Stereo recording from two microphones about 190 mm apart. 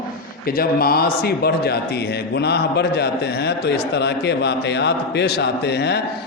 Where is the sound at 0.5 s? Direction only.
50° left (ahead or behind).